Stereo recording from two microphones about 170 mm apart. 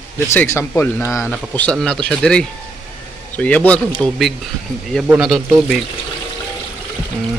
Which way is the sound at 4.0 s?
20° right (ahead or behind).